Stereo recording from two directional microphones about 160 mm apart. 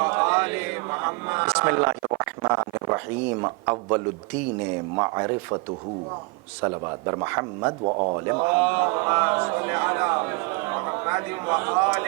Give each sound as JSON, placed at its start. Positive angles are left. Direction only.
{"t": 0.0, "sound": "mantra", "side_deg": -20}
{"t": 0.9, "sound": "speech", "side_deg": -20}
{"t": 4.9, "sound": "speech", "side_deg": -20}
{"t": 6.6, "sound": "speech", "side_deg": -25}
{"t": 7.9, "sound": "speech", "side_deg": -30}